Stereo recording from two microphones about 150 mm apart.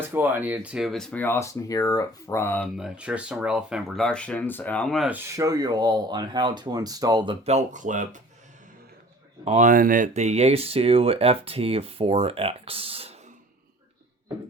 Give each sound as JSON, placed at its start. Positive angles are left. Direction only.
{"t": 0.1, "sound": "speech", "side_deg": -15}
{"t": 2.7, "sound": "speech", "side_deg": -5}
{"t": 5.0, "sound": "speech", "side_deg": -15}
{"t": 7.4, "sound": "speech", "side_deg": -50}
{"t": 9.4, "sound": "speech", "side_deg": -50}